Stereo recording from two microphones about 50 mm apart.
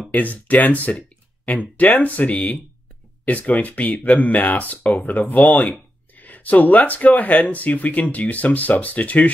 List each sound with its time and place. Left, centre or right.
0.1 s speech: left